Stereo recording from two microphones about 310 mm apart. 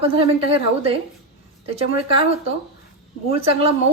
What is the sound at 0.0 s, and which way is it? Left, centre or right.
A woman's voice, centre.